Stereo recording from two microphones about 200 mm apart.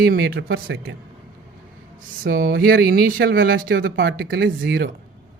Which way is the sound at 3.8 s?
60° right (ahead or behind).